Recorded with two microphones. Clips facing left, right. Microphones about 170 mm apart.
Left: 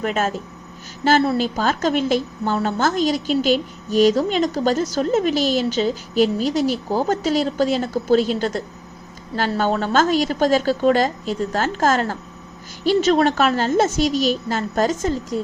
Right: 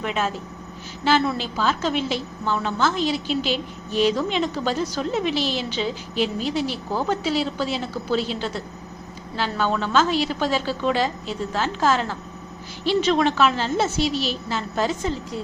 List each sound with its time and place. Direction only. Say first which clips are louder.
0.0 s a woman's voice: left 4 dB; 45° left (ahead or behind)